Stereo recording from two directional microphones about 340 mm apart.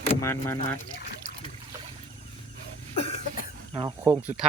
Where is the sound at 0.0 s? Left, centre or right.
Centre.